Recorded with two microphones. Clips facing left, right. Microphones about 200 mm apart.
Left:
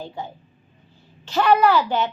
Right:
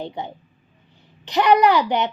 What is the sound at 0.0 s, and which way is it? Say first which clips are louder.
A woman's voice: right 3 dB; 20° right (ahead or behind).